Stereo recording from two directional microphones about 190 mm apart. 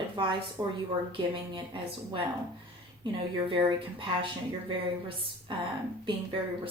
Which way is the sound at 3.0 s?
30° right (ahead or behind).